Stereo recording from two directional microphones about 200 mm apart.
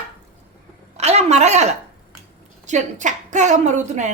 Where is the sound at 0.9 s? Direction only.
35° right (ahead or behind).